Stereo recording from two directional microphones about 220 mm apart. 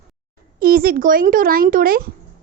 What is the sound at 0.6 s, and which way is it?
Speech, 40° right (ahead or behind).